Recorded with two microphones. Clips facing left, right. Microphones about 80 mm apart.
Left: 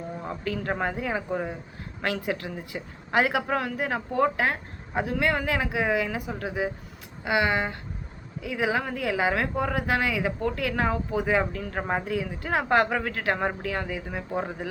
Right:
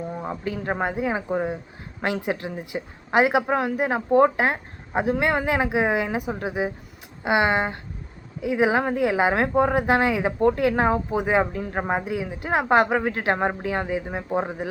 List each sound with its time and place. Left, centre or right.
0.2 s speech: right